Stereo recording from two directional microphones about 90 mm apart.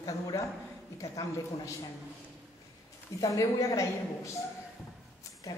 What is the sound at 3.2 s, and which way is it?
A woman's voice, 40° left (ahead or behind).